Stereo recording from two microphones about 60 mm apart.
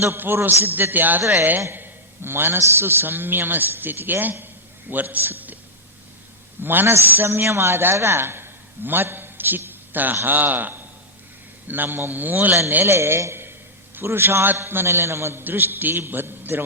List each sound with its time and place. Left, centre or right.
0.0 s a man's voice: right
1.7 s a sound: right
2.6 s a man's voice: right
6.6 s a man's voice: right
12.8 s a man's voice: right